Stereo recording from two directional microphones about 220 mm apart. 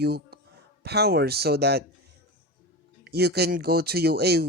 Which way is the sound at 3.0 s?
45° right (ahead or behind).